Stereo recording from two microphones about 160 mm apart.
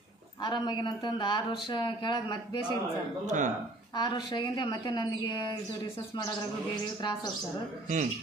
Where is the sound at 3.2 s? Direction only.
50° right (ahead or behind).